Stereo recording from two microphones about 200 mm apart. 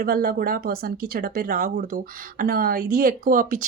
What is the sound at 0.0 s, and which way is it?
Speech, 45° right (ahead or behind).